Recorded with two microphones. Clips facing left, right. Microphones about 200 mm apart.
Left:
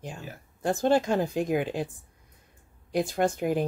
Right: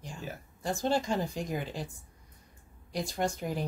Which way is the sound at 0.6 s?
55° left (ahead or behind).